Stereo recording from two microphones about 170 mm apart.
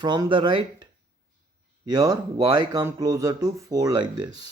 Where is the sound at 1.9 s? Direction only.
20° right (ahead or behind).